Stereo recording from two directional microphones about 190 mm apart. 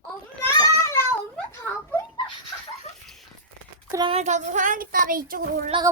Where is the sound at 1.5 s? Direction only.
15° left (ahead or behind).